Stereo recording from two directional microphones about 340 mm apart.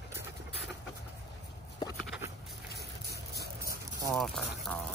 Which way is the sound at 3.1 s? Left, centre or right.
Right.